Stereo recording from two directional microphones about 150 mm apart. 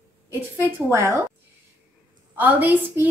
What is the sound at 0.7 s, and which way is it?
Speech, 20° right (ahead or behind).